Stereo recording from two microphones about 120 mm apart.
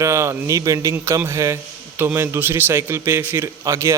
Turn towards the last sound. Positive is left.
turn(degrees=-25)  # may be behind; listen again after turning